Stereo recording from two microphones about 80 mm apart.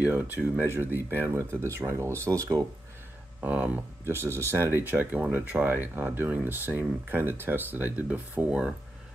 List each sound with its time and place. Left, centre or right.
0.0 s speech: centre; by 2.6 s right
3.3 s speech: centre